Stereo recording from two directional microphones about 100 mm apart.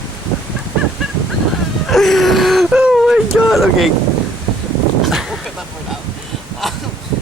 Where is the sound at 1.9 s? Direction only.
Centre (ahead or behind).